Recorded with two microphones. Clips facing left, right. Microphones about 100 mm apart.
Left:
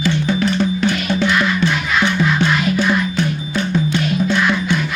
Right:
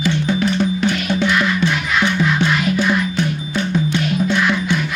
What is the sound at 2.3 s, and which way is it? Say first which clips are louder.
Music: left 1 dB; 10° right (ahead or behind).